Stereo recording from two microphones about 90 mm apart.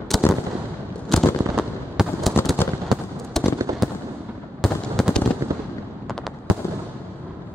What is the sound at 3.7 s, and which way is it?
Fireworks, 40° right (ahead or behind).